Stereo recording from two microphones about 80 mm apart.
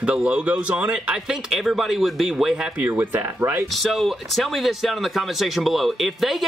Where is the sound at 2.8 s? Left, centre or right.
Right.